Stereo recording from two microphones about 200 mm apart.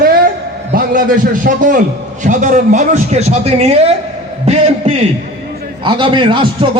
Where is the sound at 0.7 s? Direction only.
45° right (ahead or behind).